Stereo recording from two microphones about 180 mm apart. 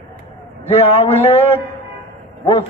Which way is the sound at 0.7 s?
35° left (ahead or behind).